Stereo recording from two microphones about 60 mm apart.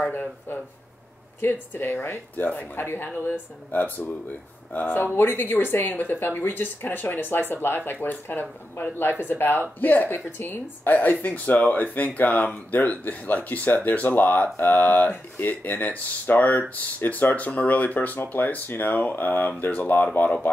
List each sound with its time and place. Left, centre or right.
0.0 s speech: left